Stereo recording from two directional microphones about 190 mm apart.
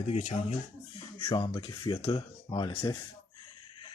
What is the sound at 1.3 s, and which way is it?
Speech, 25° left (ahead or behind).